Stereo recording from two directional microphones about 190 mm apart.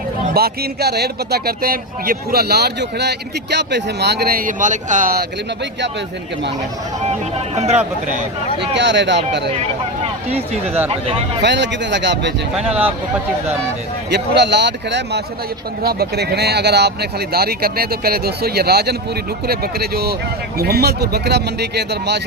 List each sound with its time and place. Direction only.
0.3 s a man's voice: 55° right (ahead or behind)
7.5 s speech: 35° right (ahead or behind)
8.7 s speech: 65° right (ahead or behind)
10.0 s a sound: 30° right (ahead or behind)
10.8 s speech: 30° right (ahead or behind)
11.4 s speech: 65° right (ahead or behind)
14.1 s a man's voice: 65° right (ahead or behind)
15.8 s a man's voice: 55° right (ahead or behind)